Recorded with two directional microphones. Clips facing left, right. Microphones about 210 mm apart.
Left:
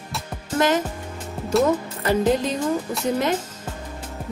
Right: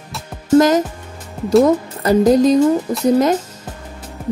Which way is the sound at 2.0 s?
40° right (ahead or behind).